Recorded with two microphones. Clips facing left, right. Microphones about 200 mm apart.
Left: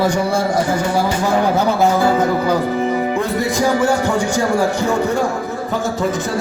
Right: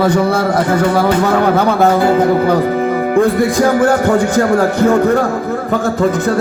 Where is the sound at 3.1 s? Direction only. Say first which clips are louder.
Right 7 dB; 55° right (ahead or behind).